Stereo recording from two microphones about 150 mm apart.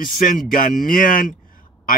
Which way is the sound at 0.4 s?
65° left (ahead or behind).